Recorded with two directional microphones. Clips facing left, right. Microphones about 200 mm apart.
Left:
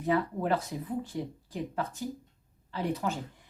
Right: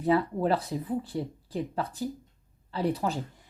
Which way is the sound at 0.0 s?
35° right (ahead or behind).